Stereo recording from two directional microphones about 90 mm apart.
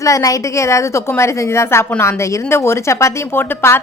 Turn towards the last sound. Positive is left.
turn(degrees=30)  # may be behind; listen again after turning